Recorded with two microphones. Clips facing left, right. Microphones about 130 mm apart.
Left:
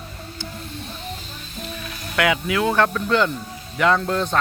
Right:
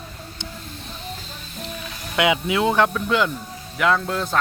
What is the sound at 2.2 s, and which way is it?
Speech, 20° right (ahead or behind).